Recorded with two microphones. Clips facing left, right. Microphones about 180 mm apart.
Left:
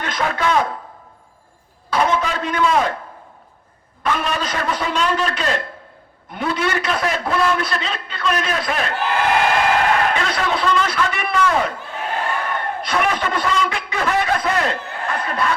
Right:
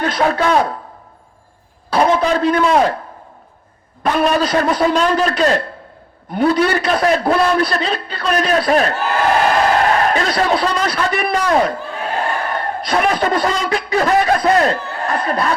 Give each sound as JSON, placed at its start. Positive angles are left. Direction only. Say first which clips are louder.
{"t": 0.0, "sound": "a man's voice", "louder": "right 5 dB", "side_deg": -35}
{"t": 1.9, "sound": "a man's voice", "louder": "right 5 dB", "side_deg": -35}
{"t": 4.0, "sound": "a man's voice", "louder": "right 7 dB", "side_deg": -35}